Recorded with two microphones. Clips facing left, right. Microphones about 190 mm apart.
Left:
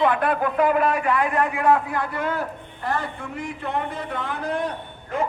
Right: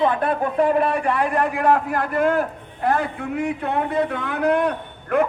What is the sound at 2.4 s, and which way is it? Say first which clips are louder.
A man's voice: right 6 dB; 55° right (ahead or behind).